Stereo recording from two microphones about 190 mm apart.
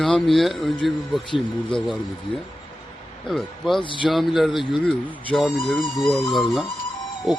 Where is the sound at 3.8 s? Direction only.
25° left (ahead or behind).